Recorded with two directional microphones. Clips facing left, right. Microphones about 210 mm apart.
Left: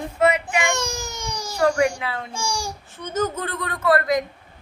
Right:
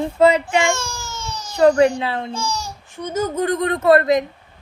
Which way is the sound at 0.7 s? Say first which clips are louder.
Left 2 dB; 20° left (ahead or behind).